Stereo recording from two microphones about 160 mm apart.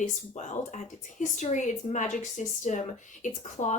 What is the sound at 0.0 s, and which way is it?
Speech, 50° left (ahead or behind).